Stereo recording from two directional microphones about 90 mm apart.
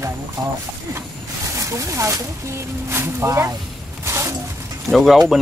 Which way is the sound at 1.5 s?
35° right (ahead or behind).